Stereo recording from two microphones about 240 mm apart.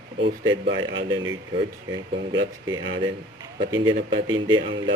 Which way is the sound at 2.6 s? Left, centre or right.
Centre.